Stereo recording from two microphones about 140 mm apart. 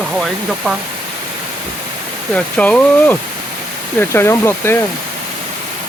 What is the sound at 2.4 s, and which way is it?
Speech, 10° left (ahead or behind).